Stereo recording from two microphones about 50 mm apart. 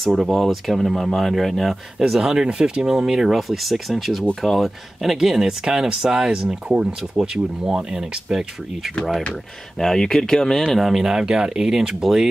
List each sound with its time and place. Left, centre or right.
0.0 s speech: centre
9.8 s speech: centre
10.8 s speech: centre